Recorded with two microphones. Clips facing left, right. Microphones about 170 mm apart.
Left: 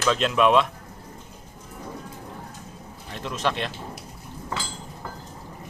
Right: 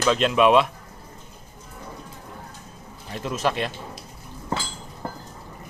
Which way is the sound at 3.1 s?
5° right (ahead or behind).